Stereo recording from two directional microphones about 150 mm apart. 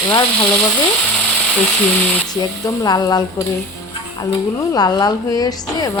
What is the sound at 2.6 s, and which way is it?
Speech, 25° left (ahead or behind).